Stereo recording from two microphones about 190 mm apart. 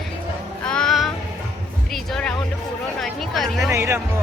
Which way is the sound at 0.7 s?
5° left (ahead or behind).